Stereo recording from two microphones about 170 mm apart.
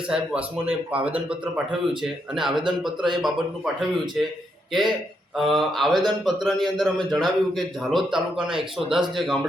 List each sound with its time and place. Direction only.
0.1 s a man's voice: 5° right (ahead or behind)